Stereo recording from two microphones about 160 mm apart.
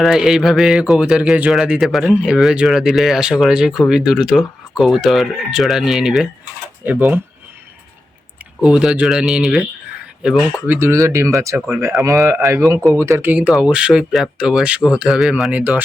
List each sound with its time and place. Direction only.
0.0 s speech: 5° right (ahead or behind)
8.6 s speech: 5° right (ahead or behind)
10.7 s speech: 15° right (ahead or behind)